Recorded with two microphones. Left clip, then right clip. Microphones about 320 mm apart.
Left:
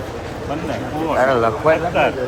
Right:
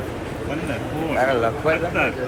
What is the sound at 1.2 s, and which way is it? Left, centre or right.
Speech, left.